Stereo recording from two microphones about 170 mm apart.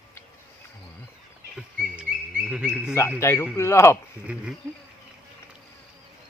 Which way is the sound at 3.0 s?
15° left (ahead or behind).